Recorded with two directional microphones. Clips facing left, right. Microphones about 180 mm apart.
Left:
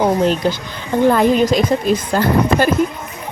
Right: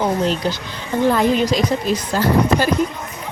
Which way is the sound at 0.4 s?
50° left (ahead or behind).